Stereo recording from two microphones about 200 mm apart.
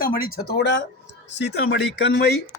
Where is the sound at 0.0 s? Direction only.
45° left (ahead or behind).